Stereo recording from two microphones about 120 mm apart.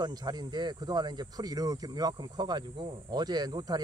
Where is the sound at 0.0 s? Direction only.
35° right (ahead or behind).